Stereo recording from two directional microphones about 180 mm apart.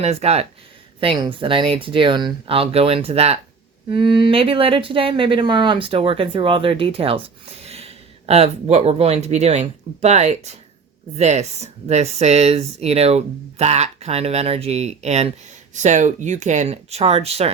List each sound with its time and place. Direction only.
0.0 s speech: 35° right (ahead or behind)